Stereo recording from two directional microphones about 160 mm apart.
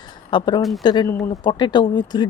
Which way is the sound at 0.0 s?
30° left (ahead or behind).